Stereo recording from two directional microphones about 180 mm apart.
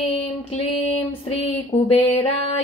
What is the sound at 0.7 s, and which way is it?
Female singing, 35° left (ahead or behind).